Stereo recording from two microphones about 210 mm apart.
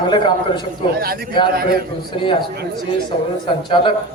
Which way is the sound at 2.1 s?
25° left (ahead or behind).